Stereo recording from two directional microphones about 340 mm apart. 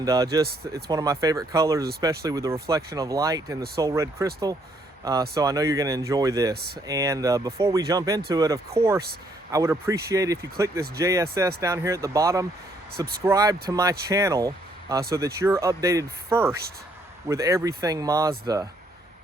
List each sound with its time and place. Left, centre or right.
0.0 s speech: centre
5.3 s speech: centre
6.5 s speech: right
6.8 s speech: centre